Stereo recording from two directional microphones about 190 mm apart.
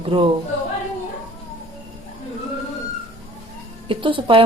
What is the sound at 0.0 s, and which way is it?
Speech, 30° right (ahead or behind).